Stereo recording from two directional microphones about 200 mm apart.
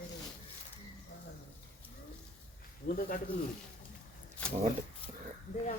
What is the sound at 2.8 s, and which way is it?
Speech, 50° left (ahead or behind).